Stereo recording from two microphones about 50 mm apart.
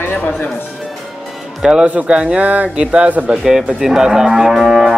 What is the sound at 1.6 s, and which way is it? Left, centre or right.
A man's voice, centre.